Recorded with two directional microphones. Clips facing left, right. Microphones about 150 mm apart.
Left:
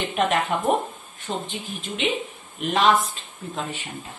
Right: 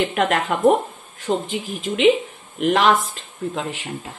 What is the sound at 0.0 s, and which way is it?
Speech, 90° right.